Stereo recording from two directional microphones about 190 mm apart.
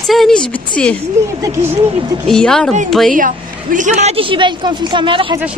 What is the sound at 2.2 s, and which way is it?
Speech, 5° left (ahead or behind).